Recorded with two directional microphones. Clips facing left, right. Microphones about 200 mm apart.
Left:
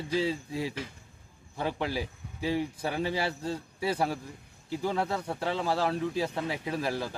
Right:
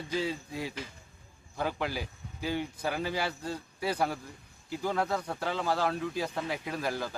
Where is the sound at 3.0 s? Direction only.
30° left (ahead or behind).